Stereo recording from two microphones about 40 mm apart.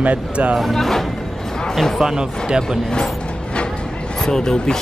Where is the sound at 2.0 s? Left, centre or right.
Centre.